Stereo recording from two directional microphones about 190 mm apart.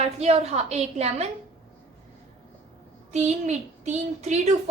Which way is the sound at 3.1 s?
35° right (ahead or behind).